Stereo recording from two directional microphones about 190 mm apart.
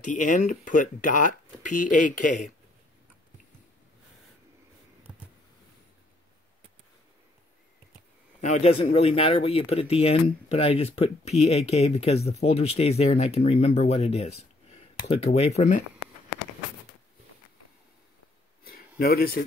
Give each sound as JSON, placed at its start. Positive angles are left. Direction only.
{"t": 0.1, "sound": "speech", "side_deg": 45}
{"t": 5.1, "sound": "vehicle", "side_deg": -10}
{"t": 8.4, "sound": "speech", "side_deg": 35}
{"t": 18.7, "sound": "a sound", "side_deg": 50}